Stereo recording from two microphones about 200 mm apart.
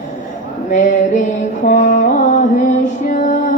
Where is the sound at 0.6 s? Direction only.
40° left (ahead or behind).